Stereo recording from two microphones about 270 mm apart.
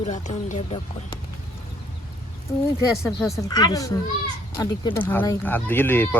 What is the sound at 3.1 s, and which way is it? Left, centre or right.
Speech, centre.